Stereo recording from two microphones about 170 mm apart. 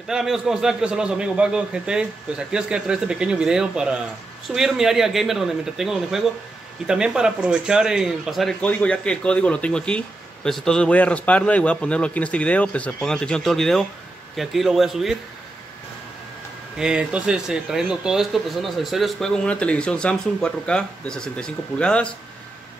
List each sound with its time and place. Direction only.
0.1 s a man's voice: centre (ahead or behind)
16.7 s a man's voice: 5° right (ahead or behind)